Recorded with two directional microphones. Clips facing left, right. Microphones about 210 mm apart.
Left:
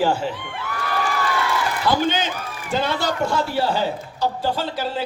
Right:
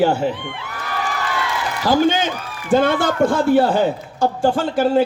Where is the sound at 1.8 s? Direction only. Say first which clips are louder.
Right 6 dB; 50° right (ahead or behind).